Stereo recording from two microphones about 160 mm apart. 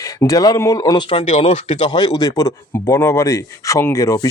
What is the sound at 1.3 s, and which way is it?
Speech, 45° left (ahead or behind).